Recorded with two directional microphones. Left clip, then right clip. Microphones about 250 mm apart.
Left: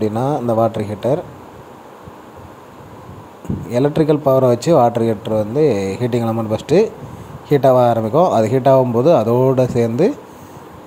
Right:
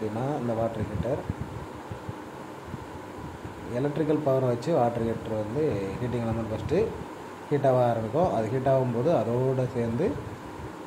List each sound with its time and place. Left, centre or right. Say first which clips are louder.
0.2 s speech: left 13 dB; left
3.7 s speech: left 12 dB; left